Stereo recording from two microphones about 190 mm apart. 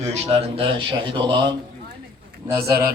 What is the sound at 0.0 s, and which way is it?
A man's voice, 35° right (ahead or behind).